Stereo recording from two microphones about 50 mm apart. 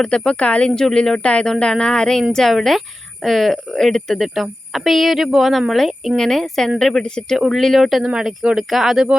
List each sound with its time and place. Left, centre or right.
0.0 s speech: centre
0.7 s a woman's voice: centre
1.2 s a woman's voice: left
7.3 s speech: centre
8.0 s speech: centre